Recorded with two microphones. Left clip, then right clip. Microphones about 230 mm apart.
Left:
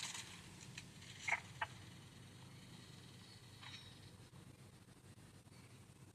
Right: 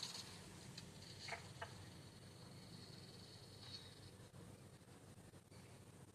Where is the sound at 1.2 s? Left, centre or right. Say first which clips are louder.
Left 11 dB; left.